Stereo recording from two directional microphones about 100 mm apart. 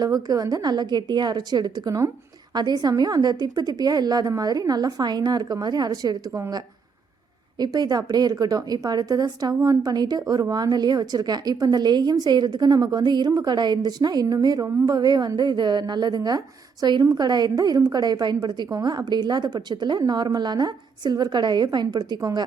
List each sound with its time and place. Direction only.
0.0 s a woman's voice: 40° right (ahead or behind)
7.6 s a woman's voice: 40° right (ahead or behind)